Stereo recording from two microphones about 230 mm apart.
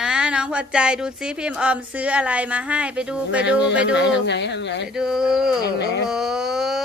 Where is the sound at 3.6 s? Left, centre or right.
Left.